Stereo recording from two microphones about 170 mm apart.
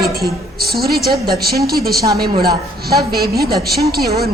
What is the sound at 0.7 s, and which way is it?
A woman's voice, 65° right (ahead or behind).